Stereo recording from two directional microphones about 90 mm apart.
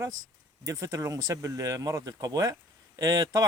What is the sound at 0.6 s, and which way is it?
Speech, 35° right (ahead or behind).